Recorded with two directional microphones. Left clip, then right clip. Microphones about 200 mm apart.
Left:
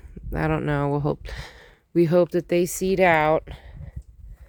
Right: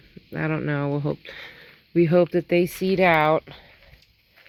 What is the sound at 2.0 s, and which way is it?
Speech, 45° left (ahead or behind).